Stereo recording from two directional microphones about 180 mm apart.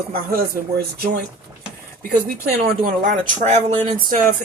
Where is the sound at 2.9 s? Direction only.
45° right (ahead or behind).